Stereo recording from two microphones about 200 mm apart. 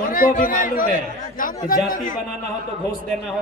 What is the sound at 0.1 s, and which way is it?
A man's voice, 45° left (ahead or behind).